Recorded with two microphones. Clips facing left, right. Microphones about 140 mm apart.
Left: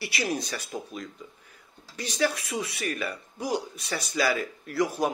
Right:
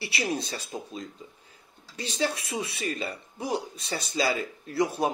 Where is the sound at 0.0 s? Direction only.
25° right (ahead or behind).